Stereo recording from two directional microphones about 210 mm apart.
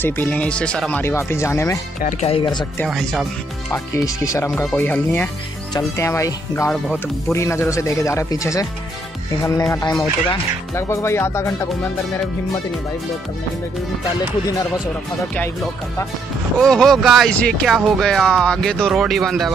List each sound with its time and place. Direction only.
0.0 s speech: 10° left (ahead or behind)
2.0 s speech: 35° left (ahead or behind)
2.9 s speech: centre (ahead or behind)
3.7 s speech: 15° left (ahead or behind)
16.5 s speech: centre (ahead or behind)